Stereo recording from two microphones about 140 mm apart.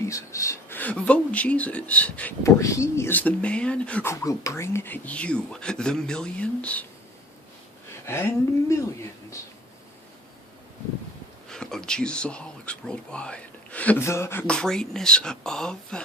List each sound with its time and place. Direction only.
0.0 s speech: 20° left (ahead or behind)
2.4 s speech: 20° left (ahead or behind)
4.1 s speech: 20° left (ahead or behind)
8.0 s a sound: 15° left (ahead or behind)
11.4 s speech: 5° left (ahead or behind)
14.4 s speech: 5° left (ahead or behind)